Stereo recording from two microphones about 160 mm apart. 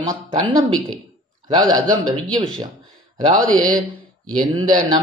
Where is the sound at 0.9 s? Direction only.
25° right (ahead or behind).